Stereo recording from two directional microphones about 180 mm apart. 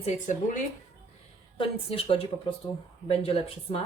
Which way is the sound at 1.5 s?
30° left (ahead or behind).